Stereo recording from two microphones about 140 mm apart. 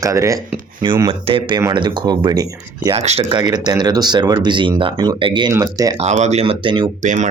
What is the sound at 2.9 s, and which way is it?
Speech, 45° right (ahead or behind).